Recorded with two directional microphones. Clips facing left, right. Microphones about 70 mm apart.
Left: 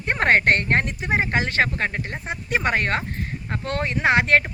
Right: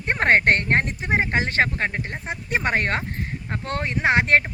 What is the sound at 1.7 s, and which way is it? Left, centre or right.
Speech, centre.